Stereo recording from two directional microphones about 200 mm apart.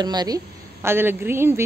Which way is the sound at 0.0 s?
20° right (ahead or behind).